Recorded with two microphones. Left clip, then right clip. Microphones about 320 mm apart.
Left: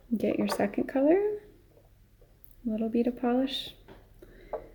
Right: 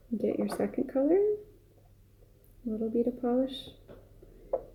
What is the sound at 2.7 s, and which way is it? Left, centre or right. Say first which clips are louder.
Speech: left 1 dB; left.